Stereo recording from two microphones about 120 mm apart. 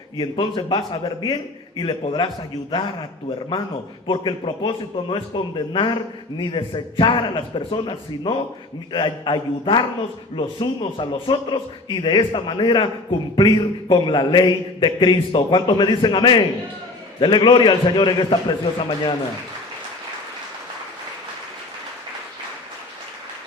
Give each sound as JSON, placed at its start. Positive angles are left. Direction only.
{"t": 0.2, "sound": "a man's voice", "side_deg": 40}